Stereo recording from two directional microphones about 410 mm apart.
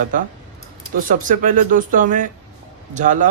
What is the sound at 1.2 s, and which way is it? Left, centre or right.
Speech, centre.